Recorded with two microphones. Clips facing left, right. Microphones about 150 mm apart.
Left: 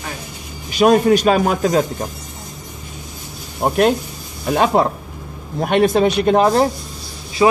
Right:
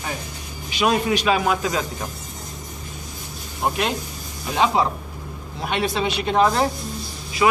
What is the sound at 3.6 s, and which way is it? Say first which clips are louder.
Speech: left 8 dB; 45° left (ahead or behind).